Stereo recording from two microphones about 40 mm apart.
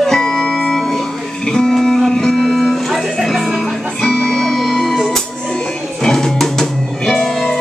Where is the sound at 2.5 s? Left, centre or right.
Centre.